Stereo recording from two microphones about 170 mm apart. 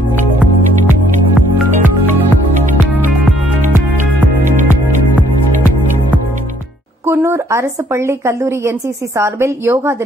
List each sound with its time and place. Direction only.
7.1 s a woman's voice: 15° right (ahead or behind)